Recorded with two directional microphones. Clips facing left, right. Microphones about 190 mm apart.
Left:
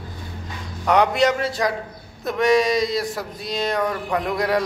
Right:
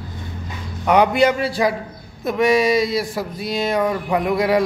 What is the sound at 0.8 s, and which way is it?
Speech, 5° right (ahead or behind).